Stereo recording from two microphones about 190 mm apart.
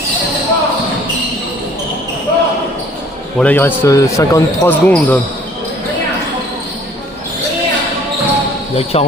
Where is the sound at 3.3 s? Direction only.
10° left (ahead or behind).